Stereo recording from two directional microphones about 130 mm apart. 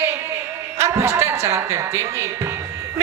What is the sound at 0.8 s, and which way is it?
A man's voice, 20° right (ahead or behind).